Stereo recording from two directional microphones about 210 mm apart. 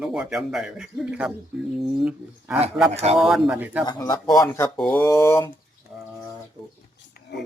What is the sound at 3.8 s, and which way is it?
Speech, 20° left (ahead or behind).